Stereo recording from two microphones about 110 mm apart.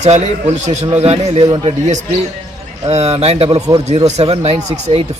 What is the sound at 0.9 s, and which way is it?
Speech, 75° right (ahead or behind).